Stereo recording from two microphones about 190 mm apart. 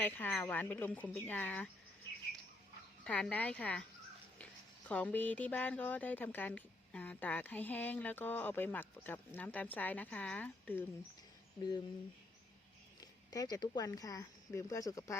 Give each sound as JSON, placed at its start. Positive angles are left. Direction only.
{"t": 0.0, "sound": "a woman's voice", "side_deg": 10}
{"t": 3.0, "sound": "a woman's voice", "side_deg": 5}
{"t": 4.9, "sound": "a woman's voice", "side_deg": 10}
{"t": 13.0, "sound": "speech", "side_deg": 20}